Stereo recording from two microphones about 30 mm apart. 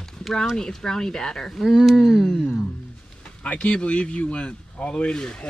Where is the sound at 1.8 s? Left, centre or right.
Centre.